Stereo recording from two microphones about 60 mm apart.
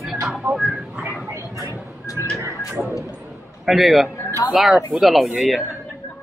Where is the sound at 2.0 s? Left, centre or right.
Left.